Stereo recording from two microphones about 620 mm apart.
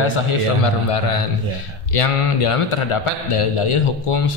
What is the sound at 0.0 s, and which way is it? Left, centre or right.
A man's voice, left.